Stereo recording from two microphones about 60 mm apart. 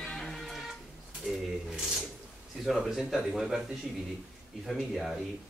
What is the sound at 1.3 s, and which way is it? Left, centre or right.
Speech, centre.